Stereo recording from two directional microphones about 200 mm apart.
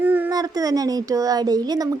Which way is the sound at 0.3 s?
20° right (ahead or behind).